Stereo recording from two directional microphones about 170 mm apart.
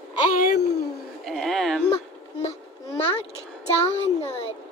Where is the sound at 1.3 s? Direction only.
Centre (ahead or behind).